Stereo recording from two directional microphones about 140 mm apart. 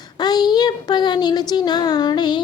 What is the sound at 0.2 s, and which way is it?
A child's voice, 30° left (ahead or behind).